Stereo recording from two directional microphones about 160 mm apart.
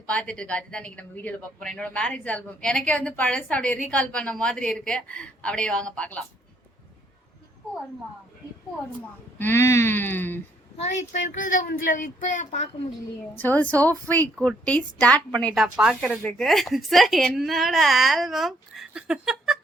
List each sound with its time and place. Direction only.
0.1 s a woman's voice: 5° left (ahead or behind)
9.4 s a woman's voice: 15° left (ahead or behind)
10.8 s speech: 50° left (ahead or behind)
13.3 s a woman's voice: 10° left (ahead or behind)